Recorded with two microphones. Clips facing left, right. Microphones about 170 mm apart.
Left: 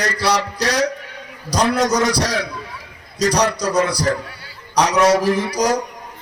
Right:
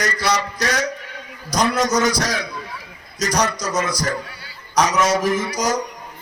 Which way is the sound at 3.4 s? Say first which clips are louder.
Left 5 dB; 65° left (ahead or behind).